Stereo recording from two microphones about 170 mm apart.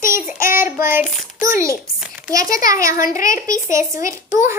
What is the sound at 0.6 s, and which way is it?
Speech, 15° right (ahead or behind).